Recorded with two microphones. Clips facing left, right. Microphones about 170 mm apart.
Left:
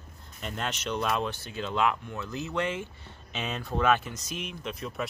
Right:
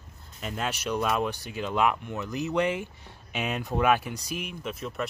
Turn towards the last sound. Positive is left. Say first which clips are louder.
# right 2 dB
turn(degrees=0)  # may be behind; listen again after turning